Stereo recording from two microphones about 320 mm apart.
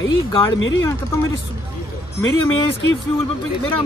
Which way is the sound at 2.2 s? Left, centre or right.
Centre.